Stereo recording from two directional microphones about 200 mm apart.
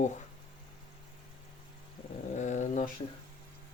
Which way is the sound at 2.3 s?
35° left (ahead or behind).